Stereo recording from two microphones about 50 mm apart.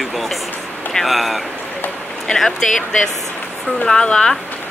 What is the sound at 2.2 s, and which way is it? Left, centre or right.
Speech, centre.